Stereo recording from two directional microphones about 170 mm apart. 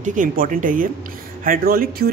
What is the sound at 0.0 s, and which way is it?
Speech, 50° right (ahead or behind).